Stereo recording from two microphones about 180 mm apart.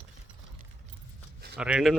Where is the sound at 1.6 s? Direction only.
5° right (ahead or behind).